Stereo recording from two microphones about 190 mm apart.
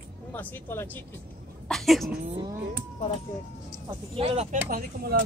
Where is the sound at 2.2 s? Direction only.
30° right (ahead or behind).